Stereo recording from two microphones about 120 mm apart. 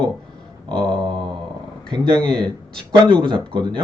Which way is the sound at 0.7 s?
5° left (ahead or behind).